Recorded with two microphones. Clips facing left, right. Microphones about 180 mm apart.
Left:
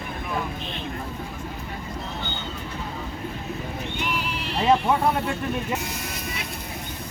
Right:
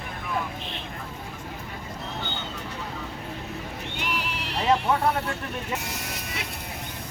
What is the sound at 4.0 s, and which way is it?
Horse, 85° right.